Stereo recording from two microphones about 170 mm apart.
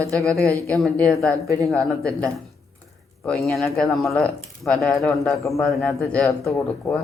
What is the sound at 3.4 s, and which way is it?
Speech, centre (ahead or behind).